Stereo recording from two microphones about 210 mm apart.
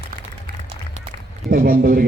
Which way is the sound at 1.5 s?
45° right (ahead or behind).